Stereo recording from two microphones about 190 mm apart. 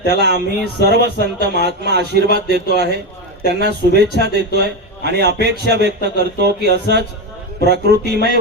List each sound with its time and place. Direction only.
0.1 s speech: 60° right (ahead or behind)